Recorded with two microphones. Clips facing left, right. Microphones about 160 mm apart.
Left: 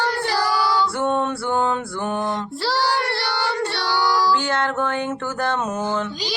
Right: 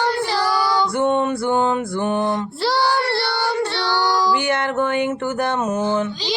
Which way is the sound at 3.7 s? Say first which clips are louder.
Right 2 dB; 10° left (ahead or behind).